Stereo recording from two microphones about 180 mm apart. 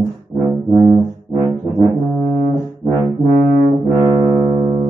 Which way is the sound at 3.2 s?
Centre (ahead or behind).